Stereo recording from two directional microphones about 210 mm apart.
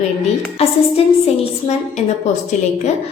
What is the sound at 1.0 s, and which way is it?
Speech, 25° left (ahead or behind).